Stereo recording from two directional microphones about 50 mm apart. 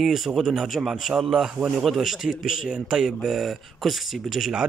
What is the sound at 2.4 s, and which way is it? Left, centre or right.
Speech, centre.